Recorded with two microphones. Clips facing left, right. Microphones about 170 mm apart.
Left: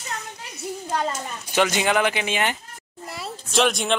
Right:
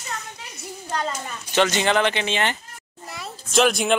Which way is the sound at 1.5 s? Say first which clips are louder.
Right 1 dB; 10° left (ahead or behind).